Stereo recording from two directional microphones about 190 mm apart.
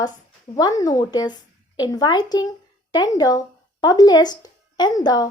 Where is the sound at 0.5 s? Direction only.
15° left (ahead or behind).